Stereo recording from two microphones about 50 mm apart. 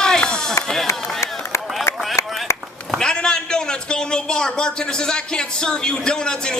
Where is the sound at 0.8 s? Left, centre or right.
Left.